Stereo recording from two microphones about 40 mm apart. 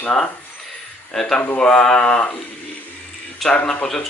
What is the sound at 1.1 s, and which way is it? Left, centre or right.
Speech, centre.